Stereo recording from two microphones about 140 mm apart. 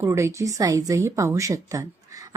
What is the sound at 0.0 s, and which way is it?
A woman's voice, 20° right (ahead or behind).